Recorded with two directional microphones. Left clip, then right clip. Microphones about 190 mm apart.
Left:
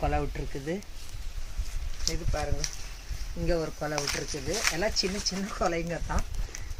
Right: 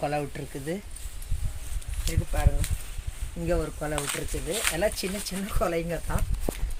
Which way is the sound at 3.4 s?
50° right (ahead or behind).